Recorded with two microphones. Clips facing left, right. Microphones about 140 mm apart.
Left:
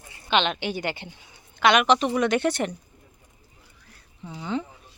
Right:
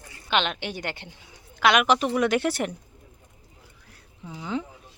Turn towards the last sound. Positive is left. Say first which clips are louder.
# left 1 dB
turn(degrees=-5)  # may be behind; listen again after turning